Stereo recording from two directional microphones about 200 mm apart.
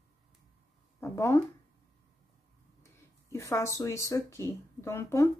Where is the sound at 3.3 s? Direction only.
15° left (ahead or behind).